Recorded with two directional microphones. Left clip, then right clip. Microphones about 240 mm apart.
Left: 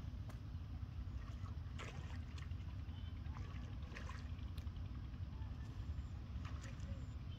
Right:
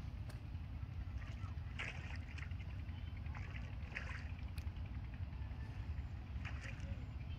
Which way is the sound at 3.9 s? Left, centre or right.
Left.